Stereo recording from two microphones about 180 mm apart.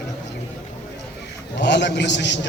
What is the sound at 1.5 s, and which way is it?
Speech, 75° left (ahead or behind).